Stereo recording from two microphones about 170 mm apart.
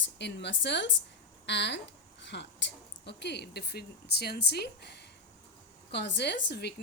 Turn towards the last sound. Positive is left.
turn(degrees=75)  # may be behind; listen again after turning